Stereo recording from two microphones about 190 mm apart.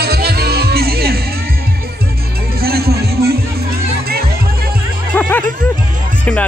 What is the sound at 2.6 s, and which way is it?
Music, 55° right (ahead or behind).